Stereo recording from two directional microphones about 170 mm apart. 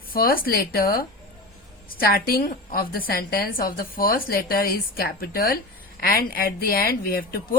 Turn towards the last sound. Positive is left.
turn(degrees=60)  # may be behind; listen again after turning